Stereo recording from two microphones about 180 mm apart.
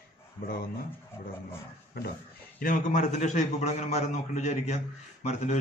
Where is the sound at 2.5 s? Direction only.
50° left (ahead or behind).